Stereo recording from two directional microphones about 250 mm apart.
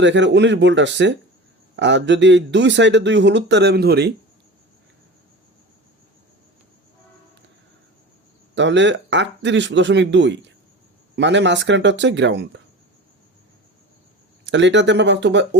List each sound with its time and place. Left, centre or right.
0.0 s a man's voice: right
8.5 s a man's voice: right
14.4 s a man's voice: right